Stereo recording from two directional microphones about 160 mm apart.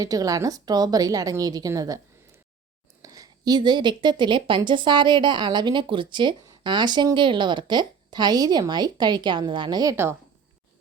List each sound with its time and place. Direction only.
0.0 s a woman's voice: 20° right (ahead or behind)
3.0 s a woman's voice: 25° right (ahead or behind)